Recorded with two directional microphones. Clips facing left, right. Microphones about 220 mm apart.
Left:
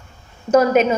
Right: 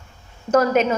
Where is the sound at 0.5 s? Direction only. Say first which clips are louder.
Left 3 dB; 20° left (ahead or behind).